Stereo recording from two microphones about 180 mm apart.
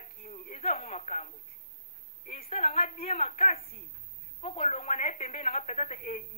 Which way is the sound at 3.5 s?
55° left (ahead or behind).